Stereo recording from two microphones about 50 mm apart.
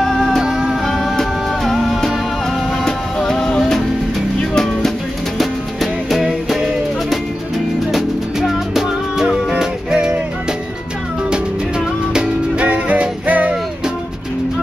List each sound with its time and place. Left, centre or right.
0.0 s music: centre
0.4 s music: centre
0.8 s music: centre
11.2 s music: centre
12.6 s music: right